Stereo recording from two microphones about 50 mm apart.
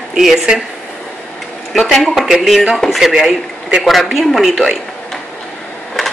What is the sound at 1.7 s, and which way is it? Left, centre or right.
A man's voice, centre.